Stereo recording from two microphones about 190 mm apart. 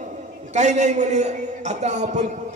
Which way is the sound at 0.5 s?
40° right (ahead or behind).